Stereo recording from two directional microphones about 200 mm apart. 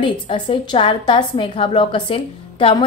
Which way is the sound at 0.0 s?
25° left (ahead or behind).